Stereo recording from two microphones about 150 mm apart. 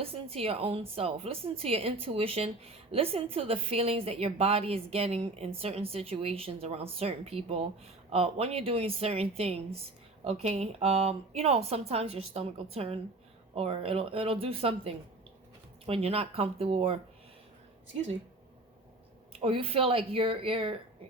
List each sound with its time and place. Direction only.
0.0 s a woman's voice: 40° right (ahead or behind)
19.3 s a woman's voice: 40° right (ahead or behind)